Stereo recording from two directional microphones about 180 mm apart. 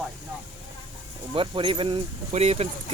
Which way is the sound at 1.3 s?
30° right (ahead or behind).